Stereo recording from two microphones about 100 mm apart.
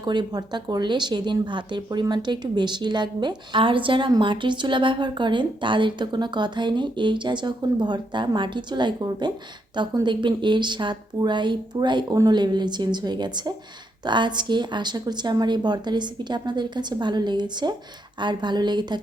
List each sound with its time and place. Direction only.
0.0 s a woman's voice: 50° right (ahead or behind)